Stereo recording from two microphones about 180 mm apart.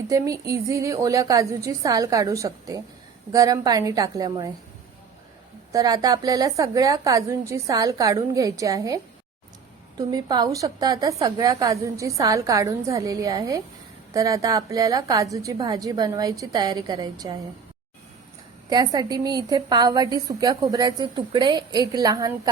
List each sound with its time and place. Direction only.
0.1 s a woman's voice: 20° right (ahead or behind)
5.7 s a woman's voice: 20° right (ahead or behind)
10.0 s a woman's voice: 20° right (ahead or behind)
18.7 s a woman's voice: 20° right (ahead or behind)